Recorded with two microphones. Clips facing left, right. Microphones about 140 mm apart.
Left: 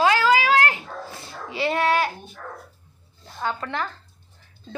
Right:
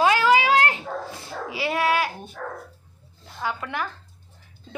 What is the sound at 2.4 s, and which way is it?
Speech, 90° right.